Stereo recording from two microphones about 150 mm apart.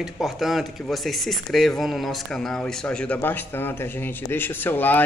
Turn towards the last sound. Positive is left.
turn(degrees=15)  # may be behind; listen again after turning